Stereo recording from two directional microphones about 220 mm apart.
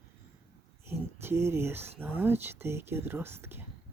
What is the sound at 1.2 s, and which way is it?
Speech, 10° right (ahead or behind).